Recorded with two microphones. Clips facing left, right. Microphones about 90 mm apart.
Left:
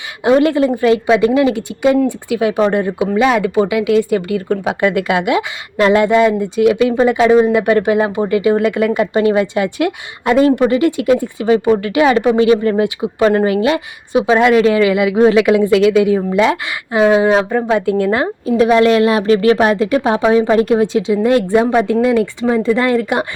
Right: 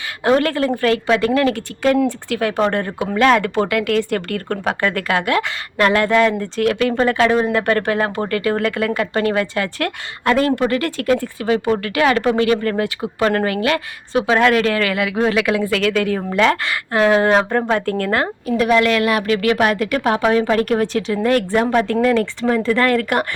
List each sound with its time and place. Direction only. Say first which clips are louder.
0.3 s a woman's voice: left 5 dB; 15° left (ahead or behind)